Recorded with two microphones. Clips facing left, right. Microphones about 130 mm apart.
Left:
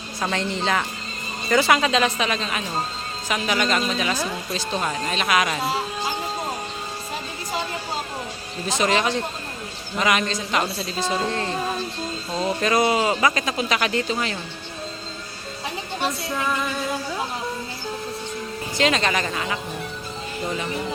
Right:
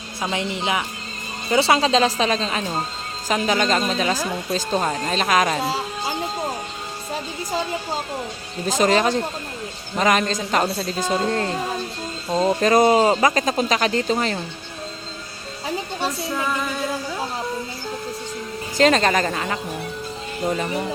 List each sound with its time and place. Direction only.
0.2 s speech: 15° right (ahead or behind)
1.5 s speech: 30° right (ahead or behind)
8.6 s speech: 40° right (ahead or behind)
12.3 s music: 25° right (ahead or behind)
12.5 s speech: 40° right (ahead or behind)
16.0 s music: centre (ahead or behind)
18.8 s speech: 40° right (ahead or behind)